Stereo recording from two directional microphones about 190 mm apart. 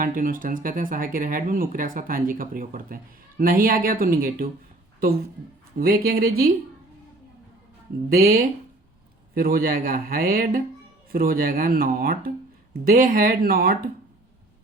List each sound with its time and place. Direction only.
0.0 s speech: 45° right (ahead or behind)
5.7 s speech: 50° right (ahead or behind)
8.1 s speech: 50° right (ahead or behind)